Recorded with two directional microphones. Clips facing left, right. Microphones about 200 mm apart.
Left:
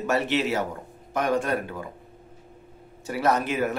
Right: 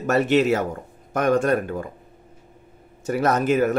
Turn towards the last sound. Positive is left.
turn(degrees=-45)  # may be behind; listen again after turning